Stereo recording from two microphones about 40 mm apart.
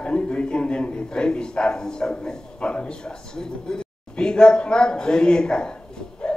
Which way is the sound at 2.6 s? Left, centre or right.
Left.